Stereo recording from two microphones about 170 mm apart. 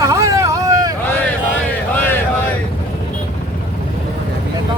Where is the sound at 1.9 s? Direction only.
10° left (ahead or behind).